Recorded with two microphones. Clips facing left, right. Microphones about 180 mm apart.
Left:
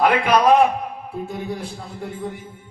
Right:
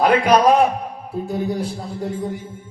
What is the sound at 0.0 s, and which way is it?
A man's voice, 35° right (ahead or behind).